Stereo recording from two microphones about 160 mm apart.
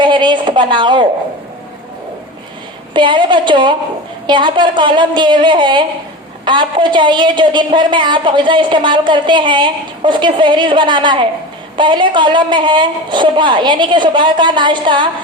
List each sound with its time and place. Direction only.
0.0 s speech: 30° right (ahead or behind)
2.9 s a woman's voice: 30° right (ahead or behind)